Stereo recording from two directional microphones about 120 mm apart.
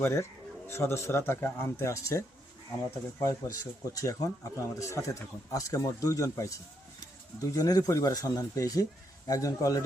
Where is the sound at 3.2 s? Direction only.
25° left (ahead or behind).